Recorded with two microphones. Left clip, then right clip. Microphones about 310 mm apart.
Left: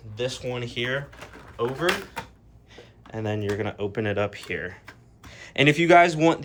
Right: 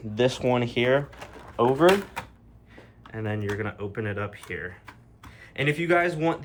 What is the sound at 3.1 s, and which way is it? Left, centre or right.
Speech, centre.